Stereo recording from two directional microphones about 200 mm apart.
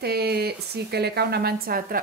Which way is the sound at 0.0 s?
55° right (ahead or behind).